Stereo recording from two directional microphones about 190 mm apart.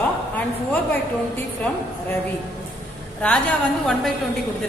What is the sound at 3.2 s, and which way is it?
Speech, 5° left (ahead or behind).